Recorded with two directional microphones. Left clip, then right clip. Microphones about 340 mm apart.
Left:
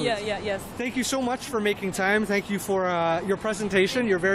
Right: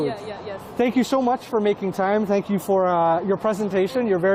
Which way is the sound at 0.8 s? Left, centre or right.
Right.